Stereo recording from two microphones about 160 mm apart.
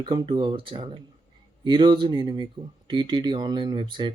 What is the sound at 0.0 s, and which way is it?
Speech, 30° right (ahead or behind).